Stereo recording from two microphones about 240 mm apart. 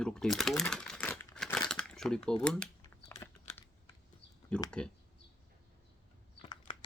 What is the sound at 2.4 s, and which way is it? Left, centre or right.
Crumpling, centre.